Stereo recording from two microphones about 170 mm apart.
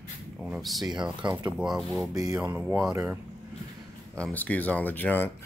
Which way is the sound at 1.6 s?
Centre (ahead or behind).